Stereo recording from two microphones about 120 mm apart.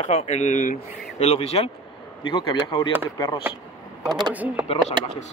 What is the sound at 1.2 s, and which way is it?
Speech, 60° left (ahead or behind).